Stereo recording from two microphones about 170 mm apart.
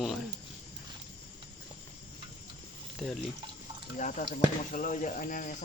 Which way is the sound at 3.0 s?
Centre (ahead or behind).